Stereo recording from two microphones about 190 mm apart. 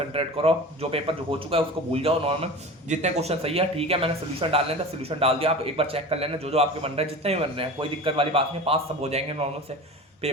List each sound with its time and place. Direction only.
0.1 s a man's voice: 30° right (ahead or behind)